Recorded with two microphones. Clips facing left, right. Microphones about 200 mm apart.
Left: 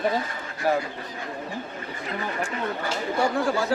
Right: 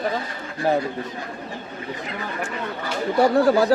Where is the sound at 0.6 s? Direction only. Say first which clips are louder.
Right 3 dB; 25° right (ahead or behind).